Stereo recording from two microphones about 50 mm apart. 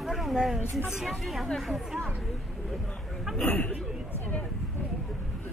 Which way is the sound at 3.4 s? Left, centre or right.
Left.